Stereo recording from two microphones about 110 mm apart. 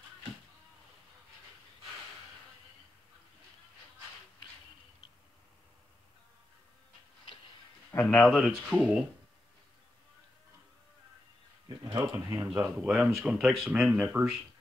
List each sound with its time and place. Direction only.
7.9 s speech: 20° left (ahead or behind)
8.3 s speech: centre (ahead or behind)
11.8 s a sound: 35° right (ahead or behind)
12.3 s speech: 10° right (ahead or behind)